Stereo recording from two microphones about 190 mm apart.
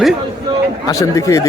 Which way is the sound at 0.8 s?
15° left (ahead or behind).